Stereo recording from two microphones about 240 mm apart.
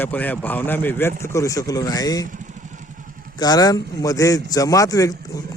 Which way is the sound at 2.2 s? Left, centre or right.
Right.